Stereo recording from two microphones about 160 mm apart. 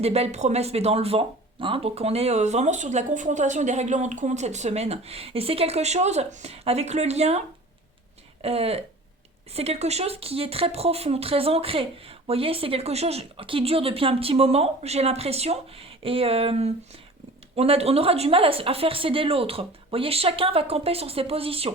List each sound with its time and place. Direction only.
0.0 s speech: 40° right (ahead or behind)